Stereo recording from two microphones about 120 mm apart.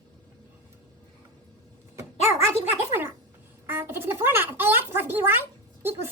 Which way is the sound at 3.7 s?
20° right (ahead or behind).